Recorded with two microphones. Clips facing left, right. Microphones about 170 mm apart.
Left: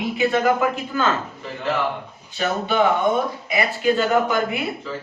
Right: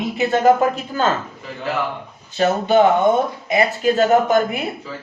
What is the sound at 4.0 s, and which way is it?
Speech, 40° right (ahead or behind).